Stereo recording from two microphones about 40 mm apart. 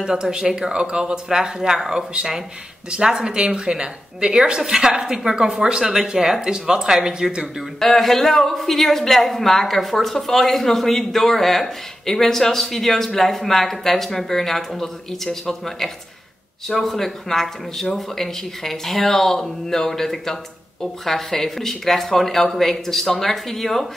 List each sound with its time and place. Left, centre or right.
0.0 s speech: centre
7.8 s a woman's voice: centre